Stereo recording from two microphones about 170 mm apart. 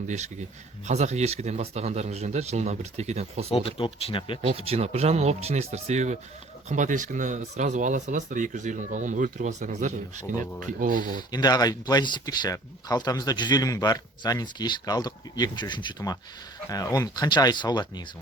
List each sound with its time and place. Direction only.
0.9 s a man's voice: 40° right (ahead or behind)
3.5 s speech: 35° left (ahead or behind)
4.4 s a man's voice: 35° right (ahead or behind)
10.3 s speech: 10° left (ahead or behind)
10.7 s speech: 50° right (ahead or behind)
11.3 s speech: 25° left (ahead or behind)